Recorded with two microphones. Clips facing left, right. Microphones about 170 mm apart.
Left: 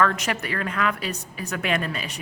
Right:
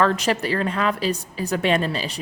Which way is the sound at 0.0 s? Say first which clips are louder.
Right 3 dB; 30° right (ahead or behind).